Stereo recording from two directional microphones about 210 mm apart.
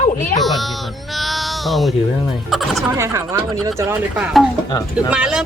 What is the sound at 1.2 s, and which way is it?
Cat, centre (ahead or behind).